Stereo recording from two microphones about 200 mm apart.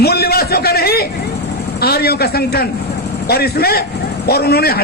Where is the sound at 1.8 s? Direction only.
50° left (ahead or behind).